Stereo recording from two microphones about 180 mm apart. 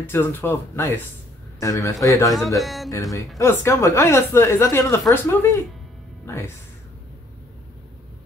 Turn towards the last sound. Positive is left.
turn(degrees=15)  # may be behind; listen again after turning